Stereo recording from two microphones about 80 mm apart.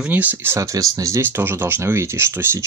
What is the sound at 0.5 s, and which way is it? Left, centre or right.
Speech, right.